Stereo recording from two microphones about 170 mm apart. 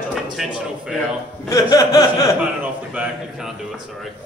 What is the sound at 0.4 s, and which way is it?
Speech, centre (ahead or behind).